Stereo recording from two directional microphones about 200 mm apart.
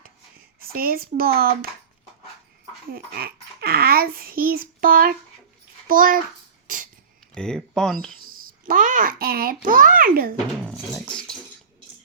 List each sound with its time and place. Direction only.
0.6 s a child's voice: 45° right (ahead or behind)
2.9 s a child's voice: 50° right (ahead or behind)
6.7 s a sound: 45° right (ahead or behind)
7.3 s speech: 5° left (ahead or behind)
8.4 s a child's voice: 45° right (ahead or behind)
10.7 s speech: 5° left (ahead or behind)